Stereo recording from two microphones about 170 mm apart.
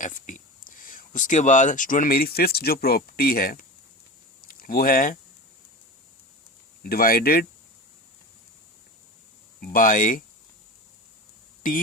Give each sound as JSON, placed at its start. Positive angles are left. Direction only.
{"t": 0.0, "sound": "speech", "side_deg": 50}
{"t": 6.8, "sound": "speech", "side_deg": 60}
{"t": 9.6, "sound": "speech", "side_deg": 55}